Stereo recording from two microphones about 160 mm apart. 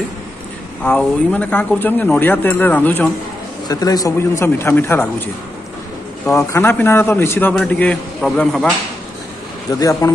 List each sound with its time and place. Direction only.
0.8 s speech: 5° left (ahead or behind)
3.6 s speech: 25° left (ahead or behind)
6.3 s a man's voice: 15° left (ahead or behind)
9.7 s speech: 20° left (ahead or behind)